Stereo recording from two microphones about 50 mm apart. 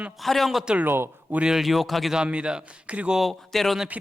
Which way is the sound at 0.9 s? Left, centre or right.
Right.